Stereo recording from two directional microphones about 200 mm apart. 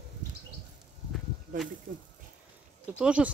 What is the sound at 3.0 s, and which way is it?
Speech, 5° right (ahead or behind).